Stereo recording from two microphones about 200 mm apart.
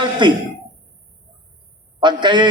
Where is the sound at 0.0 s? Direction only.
20° right (ahead or behind).